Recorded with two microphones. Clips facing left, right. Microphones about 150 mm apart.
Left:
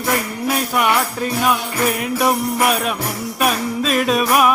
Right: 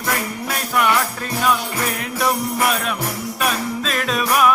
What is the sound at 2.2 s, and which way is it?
Music, 15° left (ahead or behind).